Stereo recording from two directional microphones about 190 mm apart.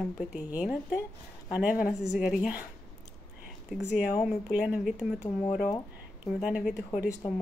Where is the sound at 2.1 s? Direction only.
Centre (ahead or behind).